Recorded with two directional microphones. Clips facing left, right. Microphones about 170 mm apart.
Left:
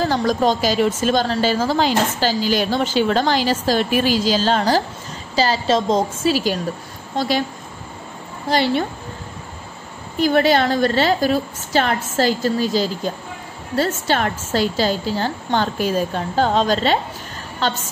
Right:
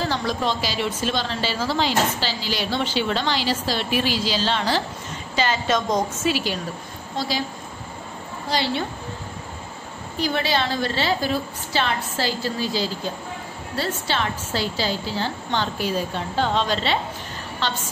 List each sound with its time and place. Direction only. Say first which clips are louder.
0.0 s a woman's voice: left 6 dB; 45° left (ahead or behind); by 6.3 s 30° left (ahead or behind)
6.3 s a woman's voice: left 5 dB; 40° left (ahead or behind)
7.2 s a woman's voice: left 6 dB; 55° left (ahead or behind)
8.5 s a woman's voice: left 6 dB; 50° left (ahead or behind)
10.2 s a woman's voice: left 8 dB; 50° left (ahead or behind)